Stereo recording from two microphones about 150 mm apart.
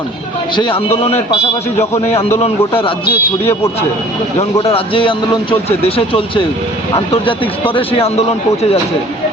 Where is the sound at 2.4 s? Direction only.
35° left (ahead or behind).